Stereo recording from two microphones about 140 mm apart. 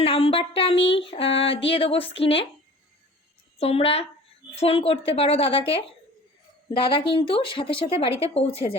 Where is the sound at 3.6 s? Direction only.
45° left (ahead or behind).